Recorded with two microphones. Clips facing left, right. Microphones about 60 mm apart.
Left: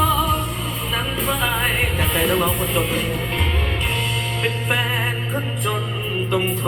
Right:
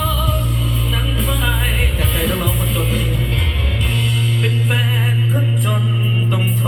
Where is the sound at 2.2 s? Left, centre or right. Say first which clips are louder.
Left 2 dB; left.